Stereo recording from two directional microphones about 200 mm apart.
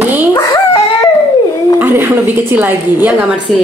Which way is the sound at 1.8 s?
10° right (ahead or behind).